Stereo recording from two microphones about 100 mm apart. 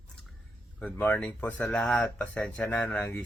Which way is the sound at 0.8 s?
15° left (ahead or behind).